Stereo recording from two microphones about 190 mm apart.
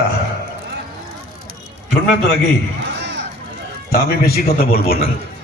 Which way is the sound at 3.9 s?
55° left (ahead or behind).